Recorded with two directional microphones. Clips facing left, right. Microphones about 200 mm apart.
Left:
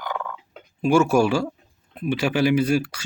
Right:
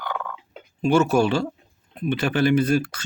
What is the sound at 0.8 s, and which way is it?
Speech, 10° left (ahead or behind).